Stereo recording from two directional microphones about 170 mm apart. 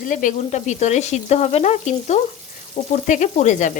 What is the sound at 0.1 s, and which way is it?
Frying, 50° left (ahead or behind).